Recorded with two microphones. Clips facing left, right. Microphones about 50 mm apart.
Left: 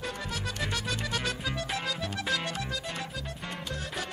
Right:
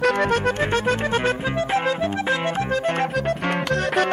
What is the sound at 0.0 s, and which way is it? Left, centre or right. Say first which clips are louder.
Music: right 17 dB; right.